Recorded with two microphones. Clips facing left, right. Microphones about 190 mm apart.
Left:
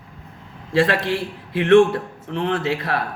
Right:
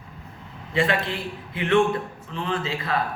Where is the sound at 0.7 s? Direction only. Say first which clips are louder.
Left 5 dB; 80° left.